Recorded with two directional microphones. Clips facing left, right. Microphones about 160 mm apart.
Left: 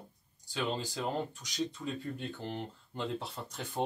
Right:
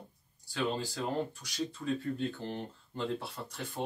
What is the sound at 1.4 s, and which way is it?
Speech, 20° left (ahead or behind).